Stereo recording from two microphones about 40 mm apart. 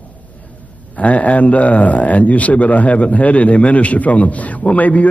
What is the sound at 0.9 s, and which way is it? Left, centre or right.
A man's voice, left.